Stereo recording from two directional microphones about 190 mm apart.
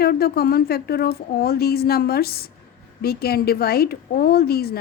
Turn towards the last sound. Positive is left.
turn(degrees=55)  # may be behind; listen again after turning